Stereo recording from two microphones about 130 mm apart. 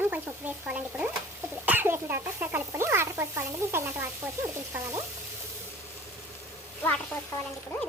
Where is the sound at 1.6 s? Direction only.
15° right (ahead or behind).